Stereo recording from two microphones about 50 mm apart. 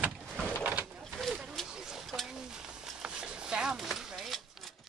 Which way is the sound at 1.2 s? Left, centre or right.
Centre.